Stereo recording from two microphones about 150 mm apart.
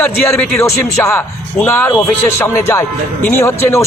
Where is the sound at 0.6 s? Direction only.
20° left (ahead or behind).